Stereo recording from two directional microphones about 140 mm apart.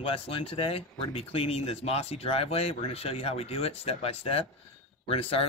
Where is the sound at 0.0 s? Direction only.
40° left (ahead or behind).